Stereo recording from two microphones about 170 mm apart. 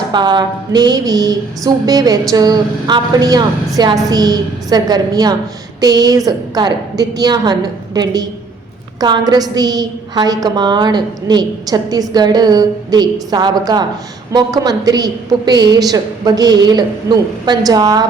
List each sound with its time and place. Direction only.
0.1 s a woman's voice: 25° right (ahead or behind)